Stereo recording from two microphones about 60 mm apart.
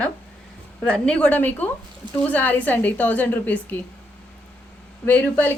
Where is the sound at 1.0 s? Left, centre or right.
Centre.